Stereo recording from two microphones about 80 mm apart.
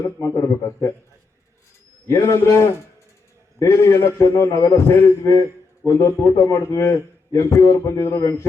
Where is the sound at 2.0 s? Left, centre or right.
Left.